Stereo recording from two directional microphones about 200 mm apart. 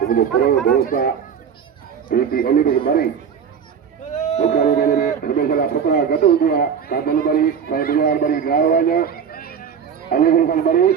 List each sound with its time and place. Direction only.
0.0 s a man's voice: 50° left (ahead or behind)
4.1 s a sound: 35° left (ahead or behind)
4.5 s a man's voice: 45° left (ahead or behind)